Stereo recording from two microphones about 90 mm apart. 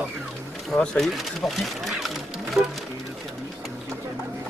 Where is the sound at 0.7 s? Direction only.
10° left (ahead or behind).